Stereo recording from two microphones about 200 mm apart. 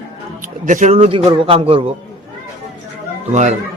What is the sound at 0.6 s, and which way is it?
A man's voice, 40° right (ahead or behind).